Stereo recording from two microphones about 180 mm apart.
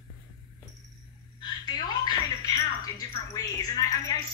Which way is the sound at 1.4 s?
25° left (ahead or behind).